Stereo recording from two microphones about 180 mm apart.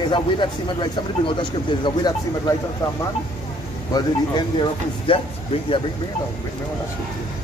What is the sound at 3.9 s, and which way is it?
Speech, 25° left (ahead or behind).